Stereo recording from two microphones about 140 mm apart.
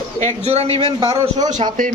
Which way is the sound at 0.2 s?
55° right (ahead or behind).